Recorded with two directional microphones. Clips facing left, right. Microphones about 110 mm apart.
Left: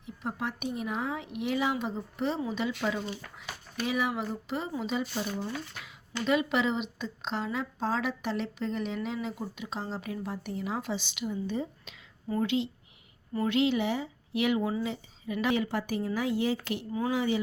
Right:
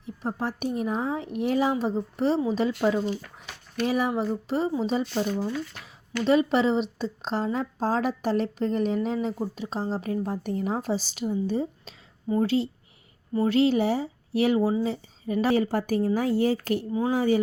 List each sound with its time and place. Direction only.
0.0 s speech: 35° right (ahead or behind)
3.8 s speech: 40° right (ahead or behind)
16.9 s speech: 30° right (ahead or behind)
17.2 s a man's voice: 45° right (ahead or behind)